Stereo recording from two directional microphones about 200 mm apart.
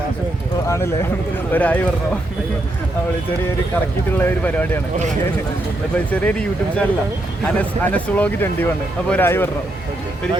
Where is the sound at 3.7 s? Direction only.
10° left (ahead or behind).